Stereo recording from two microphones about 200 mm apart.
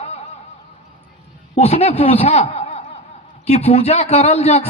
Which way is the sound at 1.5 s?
30° left (ahead or behind).